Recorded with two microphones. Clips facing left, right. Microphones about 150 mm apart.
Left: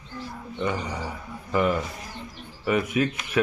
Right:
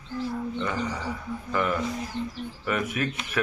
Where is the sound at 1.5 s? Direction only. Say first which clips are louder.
Left 3 dB; 15° left (ahead or behind).